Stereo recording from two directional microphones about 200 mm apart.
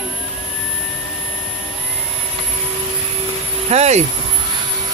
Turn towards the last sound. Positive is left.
turn(degrees=-35)  # may be behind; listen again after turning